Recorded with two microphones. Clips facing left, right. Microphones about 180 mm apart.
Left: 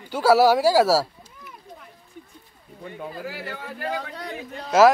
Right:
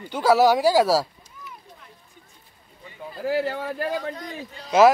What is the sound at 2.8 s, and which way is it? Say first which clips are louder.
Speech: left 5 dB; 60° left (ahead or behind).